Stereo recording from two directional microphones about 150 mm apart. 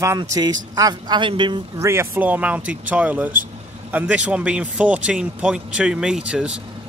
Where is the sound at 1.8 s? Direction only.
15° right (ahead or behind).